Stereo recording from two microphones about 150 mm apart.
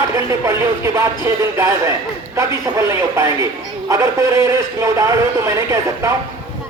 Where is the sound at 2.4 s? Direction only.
20° right (ahead or behind).